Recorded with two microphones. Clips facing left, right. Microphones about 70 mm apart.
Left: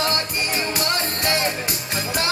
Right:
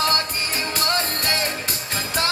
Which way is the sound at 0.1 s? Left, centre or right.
Left.